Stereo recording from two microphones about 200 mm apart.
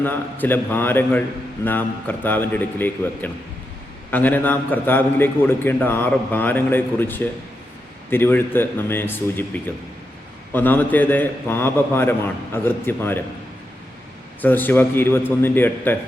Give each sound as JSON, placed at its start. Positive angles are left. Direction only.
{"t": 0.0, "sound": "a man's voice", "side_deg": 10}
{"t": 14.4, "sound": "a man's voice", "side_deg": 10}